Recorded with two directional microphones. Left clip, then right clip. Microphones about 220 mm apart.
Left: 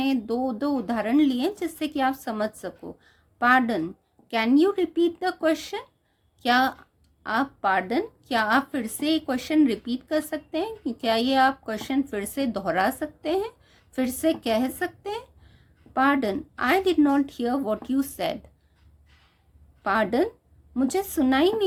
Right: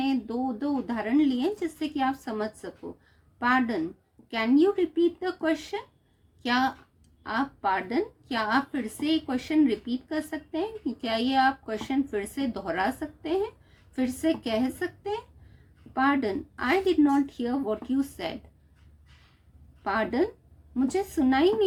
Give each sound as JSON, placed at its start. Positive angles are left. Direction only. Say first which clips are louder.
{"t": 0.0, "sound": "a woman's voice", "louder": "left 3 dB", "side_deg": 50}
{"t": 19.8, "sound": "a woman's voice", "louder": "left 4 dB", "side_deg": 50}